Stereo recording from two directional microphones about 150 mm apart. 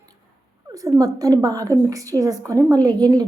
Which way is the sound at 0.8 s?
20° right (ahead or behind).